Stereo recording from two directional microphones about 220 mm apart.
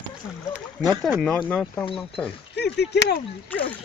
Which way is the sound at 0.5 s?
5° left (ahead or behind).